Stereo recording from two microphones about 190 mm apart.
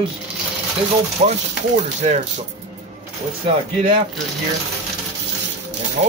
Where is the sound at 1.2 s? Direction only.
35° right (ahead or behind).